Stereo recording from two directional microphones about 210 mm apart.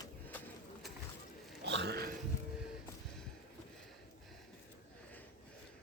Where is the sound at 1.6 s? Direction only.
55° right (ahead or behind).